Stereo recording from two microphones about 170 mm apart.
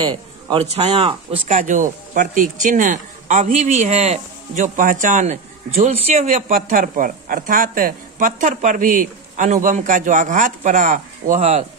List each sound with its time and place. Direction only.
0.0 s a man's voice: 25° right (ahead or behind)
1.5 s speech: 50° right (ahead or behind)